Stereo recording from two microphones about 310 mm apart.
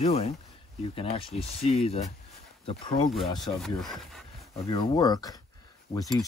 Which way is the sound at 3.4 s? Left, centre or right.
Centre.